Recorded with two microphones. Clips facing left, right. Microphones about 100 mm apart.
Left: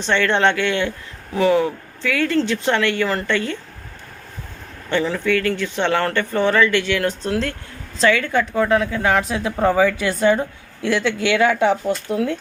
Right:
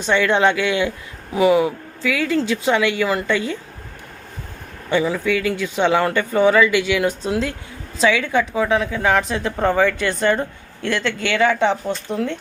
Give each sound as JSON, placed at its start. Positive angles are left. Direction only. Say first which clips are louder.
{"t": 0.0, "sound": "speech", "louder": "right 1 dB", "side_deg": -5}
{"t": 4.9, "sound": "a woman's voice", "louder": "right 1 dB", "side_deg": -10}